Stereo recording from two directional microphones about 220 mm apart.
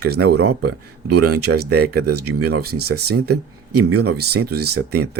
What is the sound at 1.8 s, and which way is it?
Speech, 45° right (ahead or behind).